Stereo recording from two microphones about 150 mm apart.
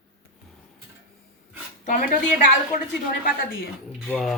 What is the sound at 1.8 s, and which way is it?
Speech, 55° left (ahead or behind).